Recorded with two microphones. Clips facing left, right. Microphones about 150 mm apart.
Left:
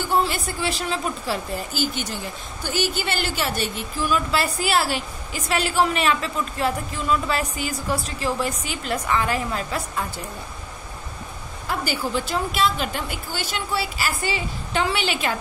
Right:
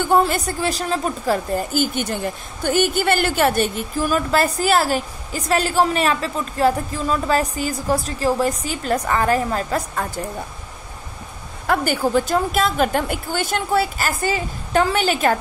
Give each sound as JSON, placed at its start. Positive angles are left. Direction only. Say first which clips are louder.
{"t": 0.0, "sound": "a woman's voice", "louder": "right 5 dB", "side_deg": -50}
{"t": 11.6, "sound": "a woman's voice", "louder": "right 7 dB", "side_deg": -55}